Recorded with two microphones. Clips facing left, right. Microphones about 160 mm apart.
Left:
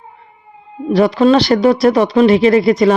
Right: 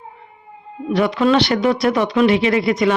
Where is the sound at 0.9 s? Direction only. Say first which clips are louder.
Left 5 dB; 35° left (ahead or behind).